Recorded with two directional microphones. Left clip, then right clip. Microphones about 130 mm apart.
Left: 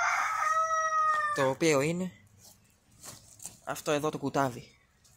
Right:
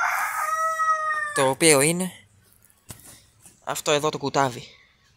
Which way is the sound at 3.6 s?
10° right (ahead or behind).